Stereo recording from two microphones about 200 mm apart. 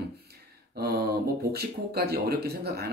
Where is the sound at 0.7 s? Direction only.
50° right (ahead or behind).